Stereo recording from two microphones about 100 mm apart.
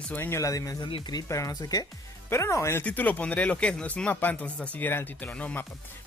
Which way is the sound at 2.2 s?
25° left (ahead or behind).